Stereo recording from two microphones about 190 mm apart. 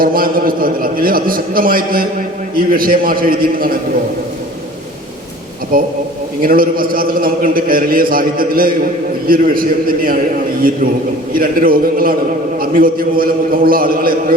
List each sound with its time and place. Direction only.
0.0 s a man's voice: 50° right (ahead or behind)
5.7 s a man's voice: 50° right (ahead or behind)
11.3 s a man's voice: 50° right (ahead or behind)